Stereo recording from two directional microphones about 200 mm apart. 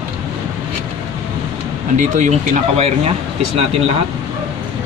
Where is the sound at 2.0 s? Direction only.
40° right (ahead or behind).